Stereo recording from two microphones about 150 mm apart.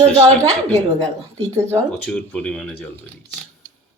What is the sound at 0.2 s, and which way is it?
Speech, 25° right (ahead or behind).